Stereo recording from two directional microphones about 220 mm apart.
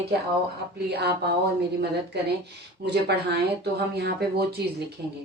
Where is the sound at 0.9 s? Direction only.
50° right (ahead or behind).